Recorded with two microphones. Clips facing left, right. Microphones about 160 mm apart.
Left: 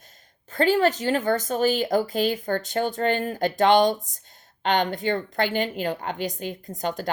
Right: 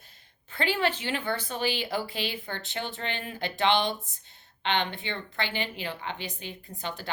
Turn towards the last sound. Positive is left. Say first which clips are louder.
# left 8 dB
turn(degrees=45)  # may be behind; listen again after turning